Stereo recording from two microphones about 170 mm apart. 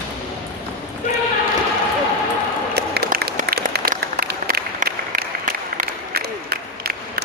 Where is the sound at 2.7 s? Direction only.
65° right (ahead or behind).